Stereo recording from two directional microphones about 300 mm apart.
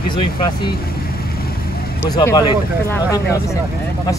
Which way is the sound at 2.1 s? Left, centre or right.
Centre.